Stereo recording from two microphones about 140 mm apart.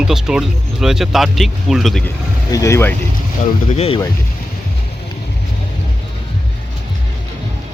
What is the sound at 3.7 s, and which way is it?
Speech, 45° left (ahead or behind).